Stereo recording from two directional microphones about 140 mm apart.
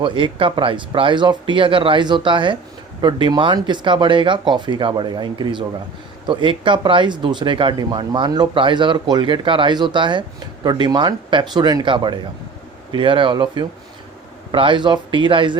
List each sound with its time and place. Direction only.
0.0 s speech: 35° right (ahead or behind)